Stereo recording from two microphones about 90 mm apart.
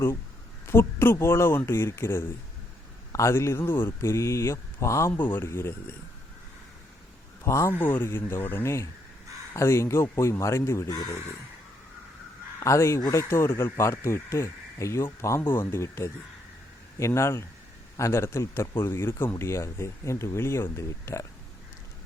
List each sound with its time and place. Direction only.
0.7 s speech: 25° left (ahead or behind)
5.1 s speech: 20° left (ahead or behind)
7.4 s a man's voice: 30° left (ahead or behind)
7.7 s speech: 20° left (ahead or behind)
12.5 s speech: 35° left (ahead or behind)
13.3 s speech: 30° left (ahead or behind)